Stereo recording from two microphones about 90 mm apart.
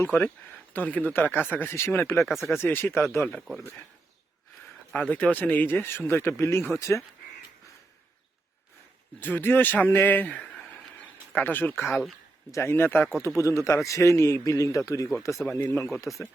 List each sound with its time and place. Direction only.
0.0 s speech: 20° left (ahead or behind)
2.2 s speech: centre (ahead or behind)
2.6 s speech: 25° left (ahead or behind)
3.3 s speech: centre (ahead or behind)
4.9 s speech: 15° left (ahead or behind); by 7.0 s 35° left (ahead or behind)
9.2 s speech: 20° left (ahead or behind)
12.5 s a man's voice: 30° left (ahead or behind)
15.4 s speech: 20° left (ahead or behind)
16.1 s speech: centre (ahead or behind)